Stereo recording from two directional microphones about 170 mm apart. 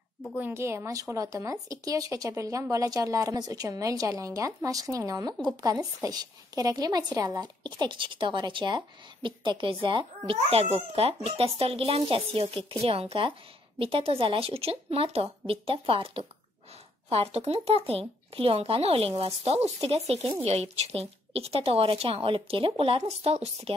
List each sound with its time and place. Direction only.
0.4 s a woman's voice: 15° right (ahead or behind); by 23.7 s 35° right (ahead or behind)